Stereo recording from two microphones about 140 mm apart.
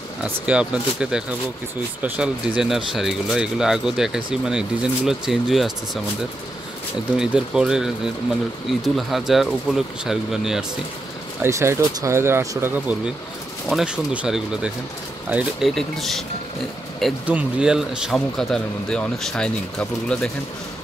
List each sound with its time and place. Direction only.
0.2 s speech: 5° right (ahead or behind)
7.2 s speech: 5° right (ahead or behind)
11.4 s speech: 20° right (ahead or behind)
15.7 s speech: centre (ahead or behind)
17.3 s speech: 10° right (ahead or behind)